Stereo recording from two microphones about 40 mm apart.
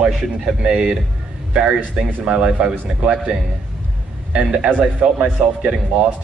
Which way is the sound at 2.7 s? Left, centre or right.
Right.